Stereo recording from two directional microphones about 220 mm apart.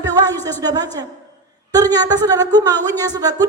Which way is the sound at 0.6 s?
15° right (ahead or behind).